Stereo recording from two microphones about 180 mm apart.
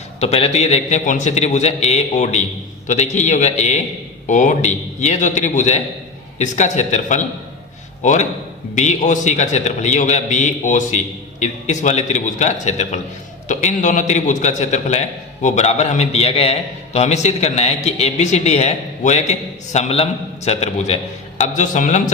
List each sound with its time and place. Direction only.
0.2 s a man's voice: 35° left (ahead or behind)